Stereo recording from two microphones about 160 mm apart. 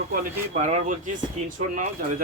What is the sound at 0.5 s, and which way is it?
Speech, 50° right (ahead or behind).